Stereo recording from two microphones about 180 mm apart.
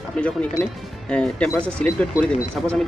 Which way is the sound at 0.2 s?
5° left (ahead or behind).